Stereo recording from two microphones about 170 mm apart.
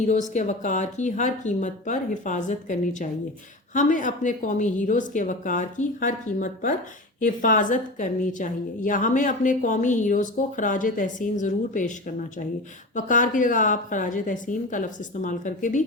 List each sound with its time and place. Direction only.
0.0 s a woman's voice: 45° left (ahead or behind)
13.0 s a woman's voice: 50° left (ahead or behind)